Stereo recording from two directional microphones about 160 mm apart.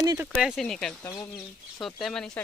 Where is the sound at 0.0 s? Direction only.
20° right (ahead or behind).